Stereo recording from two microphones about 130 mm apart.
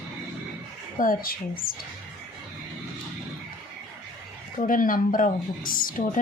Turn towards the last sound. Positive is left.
turn(degrees=90)